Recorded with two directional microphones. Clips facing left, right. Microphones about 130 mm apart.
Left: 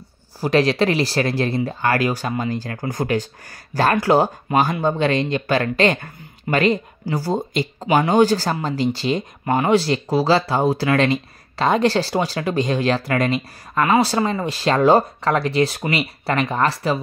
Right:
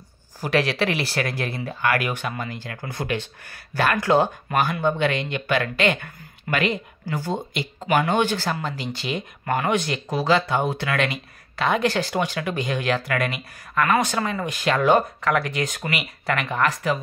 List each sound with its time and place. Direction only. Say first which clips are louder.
0.4 s speech: left 5 dB; 35° left (ahead or behind)